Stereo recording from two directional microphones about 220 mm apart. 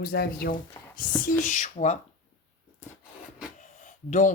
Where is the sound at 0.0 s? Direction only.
45° left (ahead or behind).